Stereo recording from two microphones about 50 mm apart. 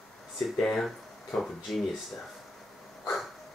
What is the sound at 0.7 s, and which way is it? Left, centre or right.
Speech, centre.